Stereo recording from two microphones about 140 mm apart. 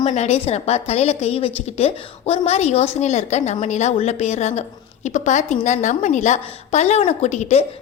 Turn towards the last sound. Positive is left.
turn(degrees=55)  # may be behind; listen again after turning